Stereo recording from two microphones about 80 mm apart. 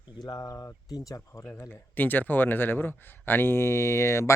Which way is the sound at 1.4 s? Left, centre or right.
Left.